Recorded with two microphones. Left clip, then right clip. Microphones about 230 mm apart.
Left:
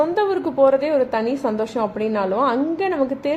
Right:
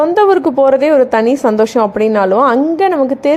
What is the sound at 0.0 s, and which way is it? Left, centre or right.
A woman's voice, right.